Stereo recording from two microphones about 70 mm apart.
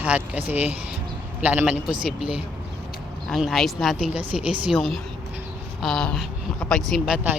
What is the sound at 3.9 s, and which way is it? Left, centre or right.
A woman's voice, centre.